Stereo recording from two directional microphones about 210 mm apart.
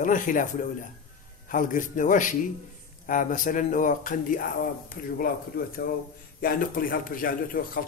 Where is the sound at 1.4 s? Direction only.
40° left (ahead or behind).